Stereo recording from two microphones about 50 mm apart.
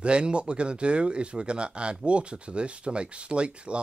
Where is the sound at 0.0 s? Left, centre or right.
Right.